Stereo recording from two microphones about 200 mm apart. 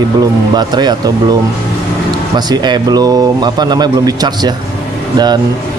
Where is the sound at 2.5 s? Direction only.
20° right (ahead or behind).